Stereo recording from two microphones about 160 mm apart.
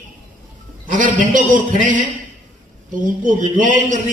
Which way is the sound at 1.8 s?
55° right (ahead or behind).